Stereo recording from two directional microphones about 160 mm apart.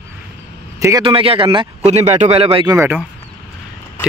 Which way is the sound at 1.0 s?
35° right (ahead or behind).